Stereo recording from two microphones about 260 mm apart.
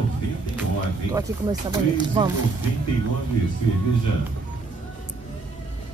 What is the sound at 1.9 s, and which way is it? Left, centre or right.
Speech, centre.